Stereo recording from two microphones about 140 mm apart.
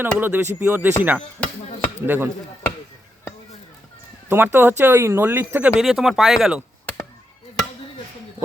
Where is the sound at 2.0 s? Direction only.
10° right (ahead or behind).